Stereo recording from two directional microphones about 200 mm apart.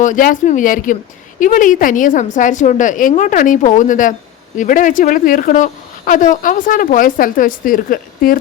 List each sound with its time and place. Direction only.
0.0 s a woman's voice: 40° left (ahead or behind)